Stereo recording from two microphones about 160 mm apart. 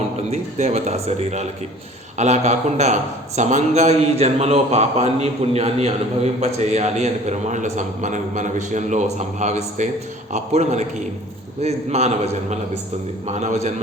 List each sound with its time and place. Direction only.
0.3 s a man's voice: 45° right (ahead or behind)